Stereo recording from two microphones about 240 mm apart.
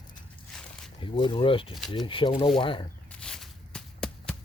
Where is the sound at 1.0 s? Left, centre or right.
Left.